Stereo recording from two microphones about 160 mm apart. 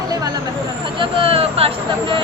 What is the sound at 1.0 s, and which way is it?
Speech, 35° right (ahead or behind).